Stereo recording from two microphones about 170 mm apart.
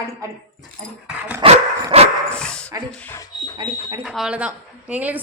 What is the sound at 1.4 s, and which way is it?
Dog, 35° right (ahead or behind).